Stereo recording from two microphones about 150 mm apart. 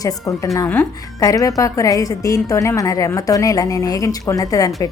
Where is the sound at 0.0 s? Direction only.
20° left (ahead or behind).